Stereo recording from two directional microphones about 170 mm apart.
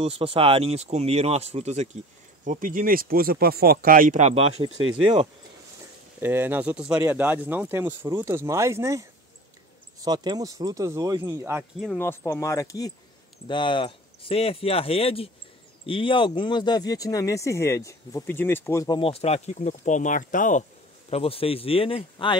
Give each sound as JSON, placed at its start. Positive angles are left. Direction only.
{"t": 0.0, "sound": "speech", "side_deg": -35}
{"t": 6.2, "sound": "speech", "side_deg": -10}
{"t": 12.0, "sound": "speech", "side_deg": 15}
{"t": 18.9, "sound": "speech", "side_deg": 35}
{"t": 21.1, "sound": "speech", "side_deg": 35}